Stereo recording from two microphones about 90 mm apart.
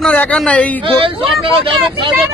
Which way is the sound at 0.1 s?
15° left (ahead or behind).